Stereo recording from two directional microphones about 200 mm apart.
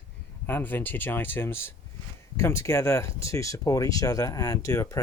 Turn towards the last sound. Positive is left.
turn(degrees=15)  # may be behind; listen again after turning